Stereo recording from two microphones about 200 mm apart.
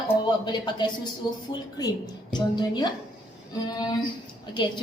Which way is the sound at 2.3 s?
20° left (ahead or behind).